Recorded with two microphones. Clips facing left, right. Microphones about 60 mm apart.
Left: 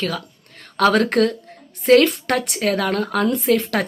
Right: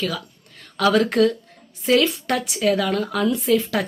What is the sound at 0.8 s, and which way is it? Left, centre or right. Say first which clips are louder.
Speech: left 1 dB; left.